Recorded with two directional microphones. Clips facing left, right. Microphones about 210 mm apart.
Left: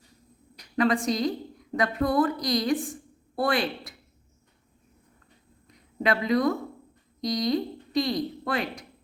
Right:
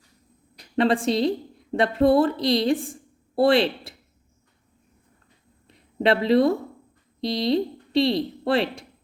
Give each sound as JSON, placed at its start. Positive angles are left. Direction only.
{"t": 0.6, "sound": "a woman's voice", "side_deg": -30}
{"t": 5.6, "sound": "a sound", "side_deg": -30}
{"t": 7.2, "sound": "a woman's voice", "side_deg": -30}